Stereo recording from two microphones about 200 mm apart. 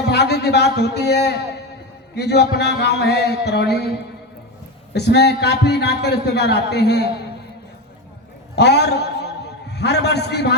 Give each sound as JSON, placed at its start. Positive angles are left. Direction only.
{"t": 0.0, "sound": "a man's voice", "side_deg": 55}
{"t": 4.9, "sound": "a man's voice", "side_deg": 55}
{"t": 8.5, "sound": "a man's voice", "side_deg": 60}